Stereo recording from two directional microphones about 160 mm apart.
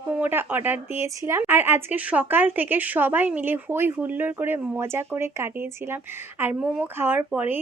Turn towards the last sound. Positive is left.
turn(degrees=-10)  # may be behind; listen again after turning